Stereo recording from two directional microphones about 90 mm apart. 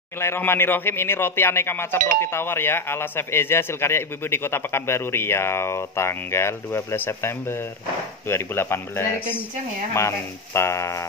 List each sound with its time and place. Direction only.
0.2 s speech: 30° left (ahead or behind)